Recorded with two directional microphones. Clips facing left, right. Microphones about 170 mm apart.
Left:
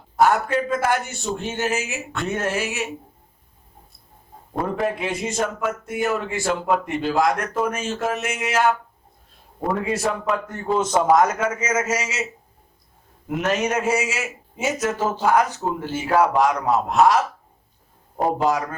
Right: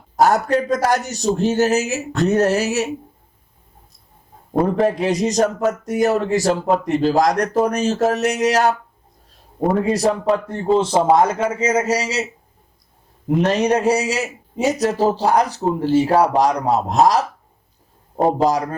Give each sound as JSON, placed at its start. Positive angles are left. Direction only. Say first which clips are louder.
{"t": 0.2, "sound": "a man's voice", "louder": "right 3 dB", "side_deg": -40}
{"t": 4.6, "sound": "a man's voice", "louder": "right 6 dB", "side_deg": -40}
{"t": 13.2, "sound": "a man's voice", "louder": "right 6 dB", "side_deg": -35}